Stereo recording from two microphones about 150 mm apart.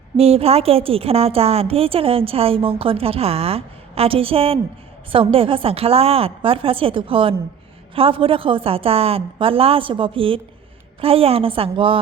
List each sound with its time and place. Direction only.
0.2 s a woman's voice: 40° right (ahead or behind)